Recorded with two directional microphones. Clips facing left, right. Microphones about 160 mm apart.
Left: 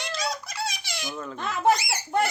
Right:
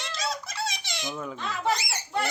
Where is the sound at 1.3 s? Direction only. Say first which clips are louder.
Left 3 dB; 50° left (ahead or behind).